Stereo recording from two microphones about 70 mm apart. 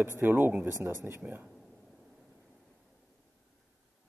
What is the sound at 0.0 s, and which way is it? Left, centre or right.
Speech, right.